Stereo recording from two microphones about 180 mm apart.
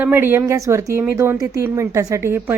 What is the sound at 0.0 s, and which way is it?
Speech, 10° right (ahead or behind).